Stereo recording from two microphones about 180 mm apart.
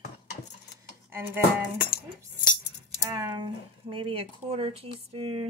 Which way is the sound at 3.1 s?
25° right (ahead or behind).